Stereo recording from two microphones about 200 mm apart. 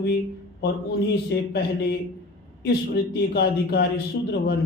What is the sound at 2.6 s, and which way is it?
A man's voice, 55° left (ahead or behind).